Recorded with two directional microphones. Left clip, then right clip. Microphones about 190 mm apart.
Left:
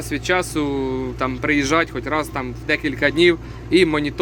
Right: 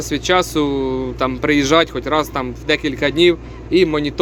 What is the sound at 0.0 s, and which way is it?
Speech, 15° right (ahead or behind).